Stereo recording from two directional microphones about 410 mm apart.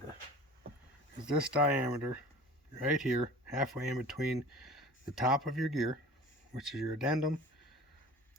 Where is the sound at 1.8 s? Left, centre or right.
Centre.